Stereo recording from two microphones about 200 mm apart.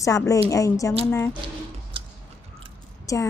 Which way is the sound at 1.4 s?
25° right (ahead or behind).